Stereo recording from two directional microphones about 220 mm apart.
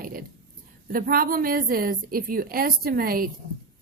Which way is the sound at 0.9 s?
40° right (ahead or behind).